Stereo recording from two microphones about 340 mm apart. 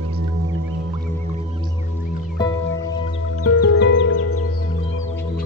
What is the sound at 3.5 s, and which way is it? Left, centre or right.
Music, left.